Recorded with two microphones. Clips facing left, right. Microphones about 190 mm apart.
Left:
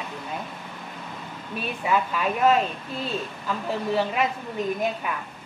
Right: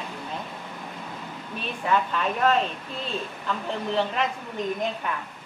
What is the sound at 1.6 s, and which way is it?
Speech, 5° left (ahead or behind).